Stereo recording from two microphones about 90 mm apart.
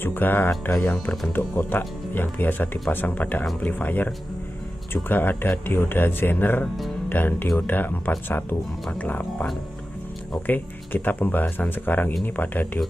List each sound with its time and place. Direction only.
0.0 s speech: 20° left (ahead or behind)